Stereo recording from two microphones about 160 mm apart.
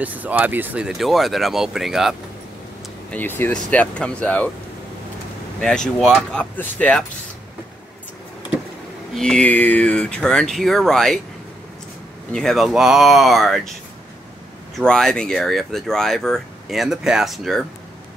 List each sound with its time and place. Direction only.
0.0 s speech: 10° right (ahead or behind)
3.1 s speech: 10° left (ahead or behind)
5.6 s speech: 5° left (ahead or behind)
9.1 s speech: 5° left (ahead or behind)
12.3 s speech: 5° left (ahead or behind)
14.8 s speech: 5° left (ahead or behind)